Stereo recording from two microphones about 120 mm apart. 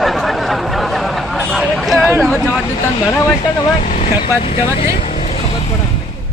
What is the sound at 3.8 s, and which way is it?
Speech, 90° left.